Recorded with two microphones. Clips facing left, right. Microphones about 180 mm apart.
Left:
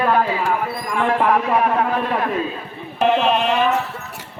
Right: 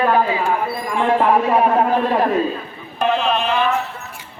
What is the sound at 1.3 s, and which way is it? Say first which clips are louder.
A man's voice: right 2 dB; 30° right (ahead or behind).